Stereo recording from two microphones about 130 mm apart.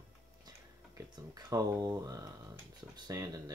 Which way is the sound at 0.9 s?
30° right (ahead or behind).